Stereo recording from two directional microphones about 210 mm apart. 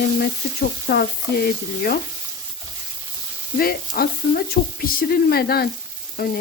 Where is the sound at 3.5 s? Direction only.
45° left (ahead or behind).